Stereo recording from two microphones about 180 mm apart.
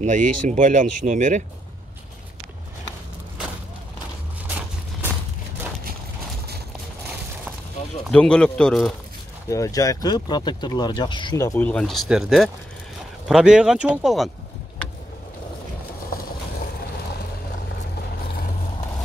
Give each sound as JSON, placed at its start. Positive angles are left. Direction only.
{"t": 0.0, "sound": "speech", "side_deg": -45}
{"t": 8.1, "sound": "speech", "side_deg": 5}
{"t": 9.5, "sound": "speech", "side_deg": 20}